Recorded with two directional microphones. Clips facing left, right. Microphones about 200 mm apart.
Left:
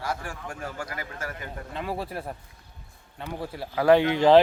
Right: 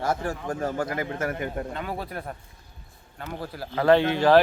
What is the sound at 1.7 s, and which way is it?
Speech, centre (ahead or behind).